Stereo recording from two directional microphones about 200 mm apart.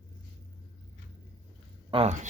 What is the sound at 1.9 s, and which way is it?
Speech, 30° right (ahead or behind).